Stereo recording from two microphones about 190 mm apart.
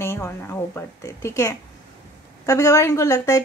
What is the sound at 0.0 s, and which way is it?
A woman's voice, 15° left (ahead or behind).